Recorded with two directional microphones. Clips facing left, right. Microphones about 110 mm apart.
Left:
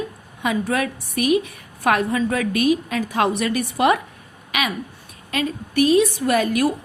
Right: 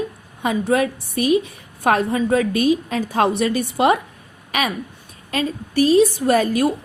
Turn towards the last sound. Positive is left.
turn(degrees=-30)  # may be behind; listen again after turning